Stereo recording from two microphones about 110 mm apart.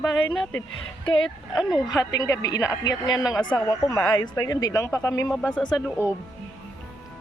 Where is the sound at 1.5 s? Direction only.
5° right (ahead or behind).